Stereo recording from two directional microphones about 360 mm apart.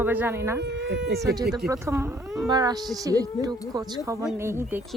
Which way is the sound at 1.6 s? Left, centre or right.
Centre.